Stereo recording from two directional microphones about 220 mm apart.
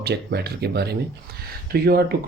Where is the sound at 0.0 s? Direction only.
50° right (ahead or behind).